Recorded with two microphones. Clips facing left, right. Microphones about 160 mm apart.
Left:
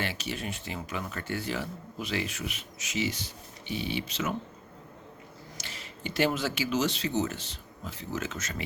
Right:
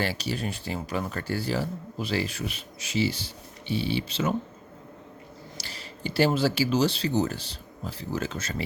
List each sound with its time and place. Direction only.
0.0 s speech: 35° right (ahead or behind)
5.5 s speech: 35° right (ahead or behind)